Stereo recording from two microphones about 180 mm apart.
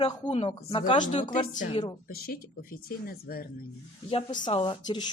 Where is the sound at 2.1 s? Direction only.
55° left (ahead or behind).